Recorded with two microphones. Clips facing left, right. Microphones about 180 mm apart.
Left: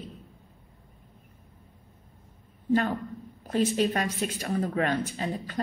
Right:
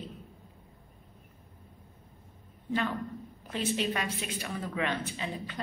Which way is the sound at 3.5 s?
45° left (ahead or behind).